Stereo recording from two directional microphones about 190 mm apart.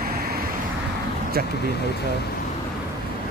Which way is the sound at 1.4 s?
55° right (ahead or behind).